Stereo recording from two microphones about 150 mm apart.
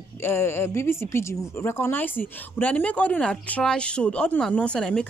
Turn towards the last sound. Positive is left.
turn(degrees=5)  # may be behind; listen again after turning